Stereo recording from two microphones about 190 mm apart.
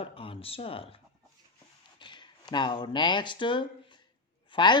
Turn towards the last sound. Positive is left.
turn(degrees=25)  # may be behind; listen again after turning